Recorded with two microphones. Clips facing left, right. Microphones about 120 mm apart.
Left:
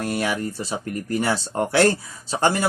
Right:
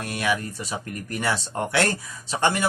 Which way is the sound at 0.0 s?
30° left (ahead or behind).